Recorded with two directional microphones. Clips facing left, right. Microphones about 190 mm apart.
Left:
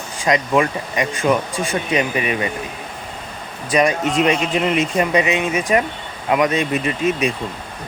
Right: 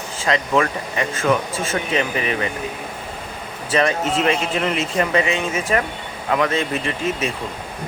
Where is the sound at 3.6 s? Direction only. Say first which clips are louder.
Left 2 dB; 15° left (ahead or behind).